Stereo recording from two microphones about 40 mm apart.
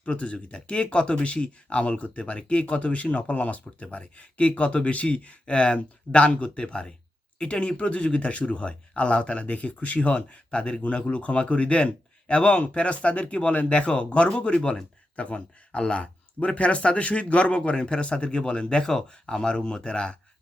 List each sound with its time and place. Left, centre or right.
0.0 s speech: left
9.4 s speech: left